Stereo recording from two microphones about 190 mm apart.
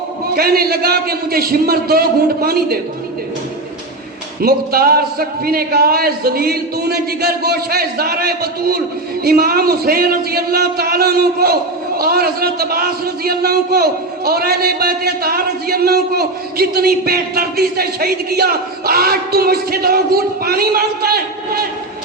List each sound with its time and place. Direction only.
0.3 s a man's voice: 55° right (ahead or behind)
4.4 s a man's voice: 50° right (ahead or behind)